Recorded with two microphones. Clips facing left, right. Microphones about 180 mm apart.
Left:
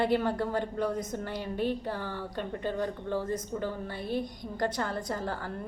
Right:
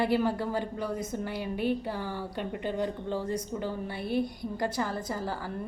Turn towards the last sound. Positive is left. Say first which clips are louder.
# even
turn(degrees=-5)  # may be behind; listen again after turning